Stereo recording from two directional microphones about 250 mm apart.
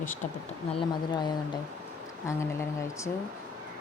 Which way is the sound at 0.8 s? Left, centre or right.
Centre.